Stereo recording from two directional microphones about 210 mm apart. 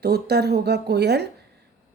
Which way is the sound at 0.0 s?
50° right (ahead or behind).